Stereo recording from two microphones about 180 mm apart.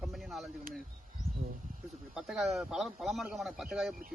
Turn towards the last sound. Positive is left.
turn(degrees=0)  # may be behind; listen again after turning